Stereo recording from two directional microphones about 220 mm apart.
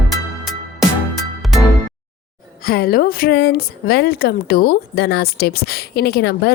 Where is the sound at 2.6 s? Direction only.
45° left (ahead or behind).